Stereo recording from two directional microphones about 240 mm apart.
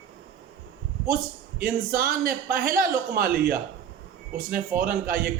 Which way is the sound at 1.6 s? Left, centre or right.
Right.